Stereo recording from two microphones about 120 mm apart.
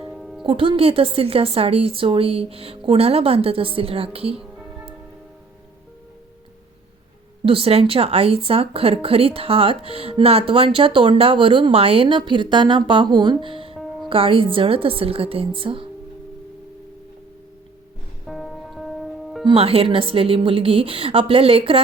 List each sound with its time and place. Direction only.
0.1 s music: centre (ahead or behind)
0.4 s speech: 45° right (ahead or behind)
7.4 s speech: 50° right (ahead or behind)
18.3 s music: centre (ahead or behind)
19.5 s speech: 55° right (ahead or behind)